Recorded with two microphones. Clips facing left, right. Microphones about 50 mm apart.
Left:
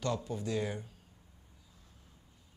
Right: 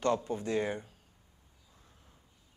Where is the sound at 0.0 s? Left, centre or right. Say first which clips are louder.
Right 5 dB; right.